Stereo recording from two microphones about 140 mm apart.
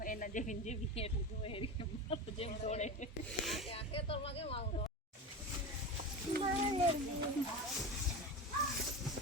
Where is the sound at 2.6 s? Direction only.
55° left (ahead or behind).